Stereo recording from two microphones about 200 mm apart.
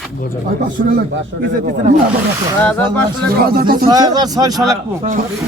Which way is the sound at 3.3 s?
50° right (ahead or behind).